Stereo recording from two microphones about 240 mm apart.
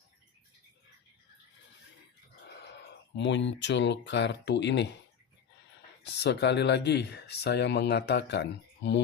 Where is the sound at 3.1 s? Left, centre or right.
Left.